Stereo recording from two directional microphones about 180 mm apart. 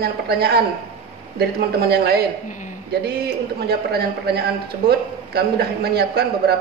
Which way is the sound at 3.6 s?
60° right (ahead or behind).